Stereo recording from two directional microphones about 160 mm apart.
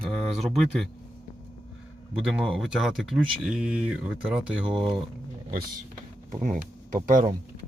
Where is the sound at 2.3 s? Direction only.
Centre (ahead or behind).